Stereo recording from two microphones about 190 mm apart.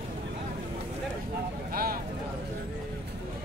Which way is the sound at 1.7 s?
50° right (ahead or behind).